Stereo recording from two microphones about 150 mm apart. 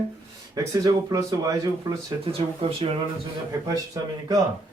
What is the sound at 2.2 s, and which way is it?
Speech, 40° right (ahead or behind).